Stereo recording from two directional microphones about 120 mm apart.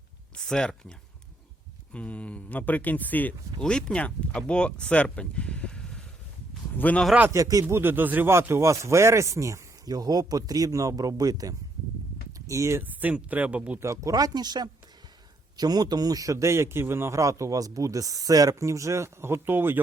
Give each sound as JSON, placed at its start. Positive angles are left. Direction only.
{"t": 0.3, "sound": "speech", "side_deg": 5}
{"t": 7.3, "sound": "speech", "side_deg": -30}
{"t": 7.6, "sound": "a man's voice", "side_deg": -15}
{"t": 13.8, "sound": "a man's voice", "side_deg": -25}